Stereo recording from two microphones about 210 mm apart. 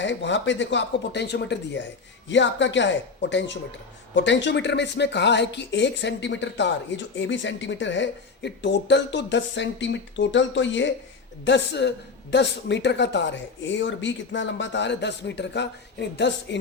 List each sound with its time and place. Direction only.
0.0 s speech: 60° left (ahead or behind)